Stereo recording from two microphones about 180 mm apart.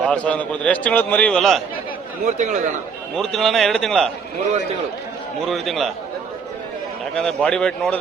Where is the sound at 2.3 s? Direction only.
45° right (ahead or behind).